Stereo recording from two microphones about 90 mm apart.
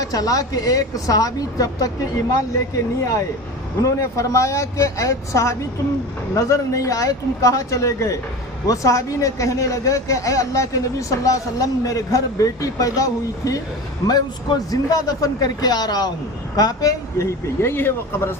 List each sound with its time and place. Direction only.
0.0 s a man's voice: 40° left (ahead or behind); by 18.3 s 25° left (ahead or behind)